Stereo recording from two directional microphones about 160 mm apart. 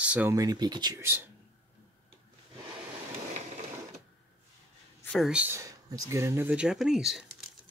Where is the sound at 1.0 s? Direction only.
15° right (ahead or behind).